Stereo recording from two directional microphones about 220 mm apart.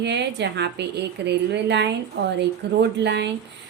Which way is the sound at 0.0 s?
50° right (ahead or behind).